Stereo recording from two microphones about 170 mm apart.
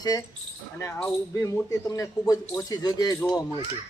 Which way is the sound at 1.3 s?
20° left (ahead or behind).